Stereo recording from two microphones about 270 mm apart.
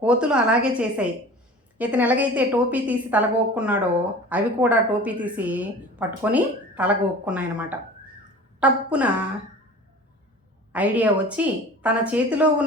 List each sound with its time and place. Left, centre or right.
0.0 s a woman's voice: centre
10.7 s a woman's voice: centre